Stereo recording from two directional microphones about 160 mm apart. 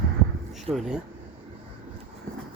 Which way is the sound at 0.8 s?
5° right (ahead or behind).